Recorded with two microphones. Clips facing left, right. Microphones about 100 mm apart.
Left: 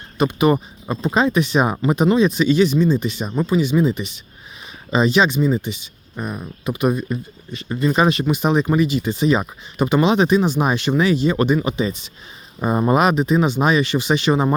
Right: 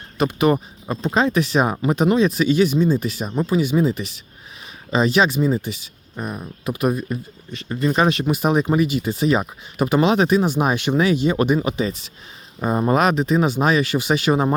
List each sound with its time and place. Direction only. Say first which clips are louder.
0.2 s speech: left 1 dB; centre (ahead or behind)